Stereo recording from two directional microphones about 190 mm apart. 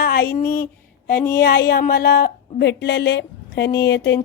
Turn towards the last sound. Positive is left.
turn(degrees=60)  # may be behind; listen again after turning